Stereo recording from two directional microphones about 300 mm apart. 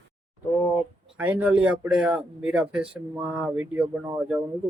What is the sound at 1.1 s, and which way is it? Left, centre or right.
Speech, centre.